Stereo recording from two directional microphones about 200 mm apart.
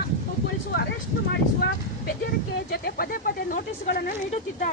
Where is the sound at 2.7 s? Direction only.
50° left (ahead or behind).